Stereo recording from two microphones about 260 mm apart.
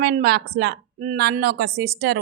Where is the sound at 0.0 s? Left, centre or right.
Right.